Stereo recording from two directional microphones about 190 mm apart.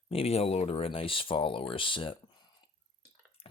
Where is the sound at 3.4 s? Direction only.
30° left (ahead or behind).